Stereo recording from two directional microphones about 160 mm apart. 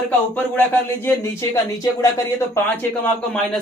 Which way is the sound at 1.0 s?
15° left (ahead or behind).